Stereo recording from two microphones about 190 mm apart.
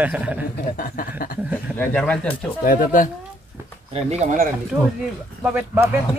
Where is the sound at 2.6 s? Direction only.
45° left (ahead or behind).